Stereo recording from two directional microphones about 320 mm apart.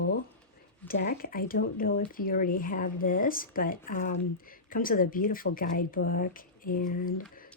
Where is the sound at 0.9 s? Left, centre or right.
Left.